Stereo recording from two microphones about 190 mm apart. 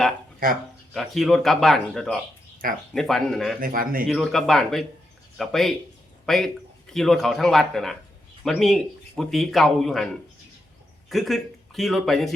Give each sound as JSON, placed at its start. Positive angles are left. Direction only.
{"t": 0.9, "sound": "speech", "side_deg": 0}
{"t": 3.6, "sound": "speech", "side_deg": -50}
{"t": 4.1, "sound": "speech", "side_deg": 0}